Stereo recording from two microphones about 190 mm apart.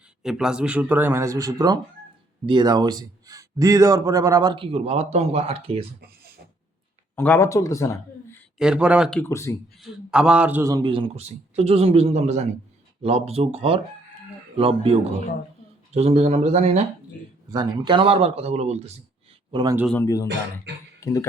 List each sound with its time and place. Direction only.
0.2 s a man's voice: 5° right (ahead or behind); by 5.8 s 30° right (ahead or behind)
7.2 s speech: 10° left (ahead or behind)
8.5 s speech: 5° right (ahead or behind); by 9.6 s 15° left (ahead or behind)
9.7 s a man's voice: 5° right (ahead or behind); by 16.8 s 35° right (ahead or behind)
17.5 s a man's voice: 20° right (ahead or behind)
19.5 s speech: 25° right (ahead or behind)
19.9 s speech: 15° left (ahead or behind)
20.2 s speech: 65° right (ahead or behind)
21.0 s speech: 15° left (ahead or behind)